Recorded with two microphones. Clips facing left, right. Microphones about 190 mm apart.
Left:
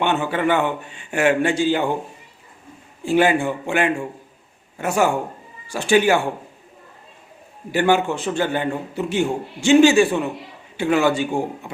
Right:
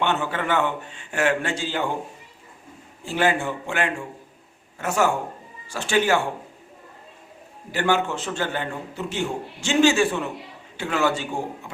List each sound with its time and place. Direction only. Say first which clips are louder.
0.0 s a man's voice: left 4 dB; 15° left (ahead or behind)
3.0 s a man's voice: left 5 dB; 15° left (ahead or behind)
7.7 s a man's voice: left 5 dB; 15° left (ahead or behind)